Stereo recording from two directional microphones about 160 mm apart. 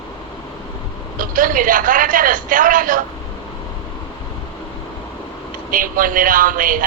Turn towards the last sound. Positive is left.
turn(degrees=-60)  # may be behind; listen again after turning